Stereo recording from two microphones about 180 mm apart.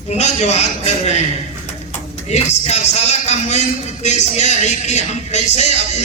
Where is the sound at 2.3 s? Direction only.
40° left (ahead or behind).